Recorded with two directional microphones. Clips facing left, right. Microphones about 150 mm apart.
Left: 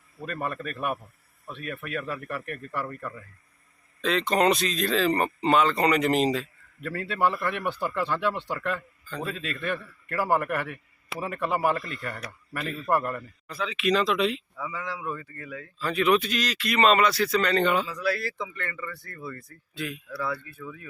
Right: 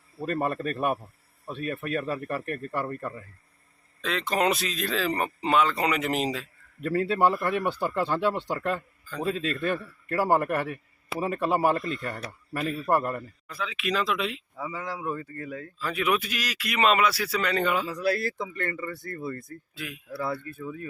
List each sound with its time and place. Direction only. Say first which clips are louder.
0.2 s speech: right 5 dB; 30° right (ahead or behind)
4.0 s speech: left 3 dB; centre (ahead or behind)
6.8 s speech: right 3 dB; 35° right (ahead or behind)
7.9 s speech: right 1 dB; 20° right (ahead or behind)
8.1 s speech: right 2 dB; 35° right (ahead or behind)
10.1 s speech: right 2 dB; 35° right (ahead or behind)
12.7 s speech: even; 10° right (ahead or behind)
13.0 s speech: right 1 dB; 25° right (ahead or behind)
13.5 s speech: left 5 dB; centre (ahead or behind)
14.5 s speech: even; 30° right (ahead or behind)
15.8 s speech: left 4 dB; 5° right (ahead or behind)
17.8 s speech: right 2 dB; 40° right (ahead or behind)
19.7 s speech: left 6 dB; 5° right (ahead or behind)
20.1 s speech: right 5 dB; 35° right (ahead or behind)